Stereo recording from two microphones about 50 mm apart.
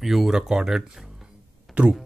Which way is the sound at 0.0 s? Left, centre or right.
Centre.